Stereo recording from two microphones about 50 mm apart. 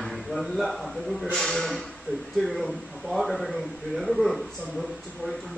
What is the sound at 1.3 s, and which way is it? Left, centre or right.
Speech, centre.